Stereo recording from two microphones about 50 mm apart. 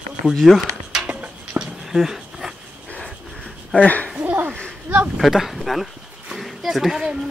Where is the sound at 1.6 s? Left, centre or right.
Centre.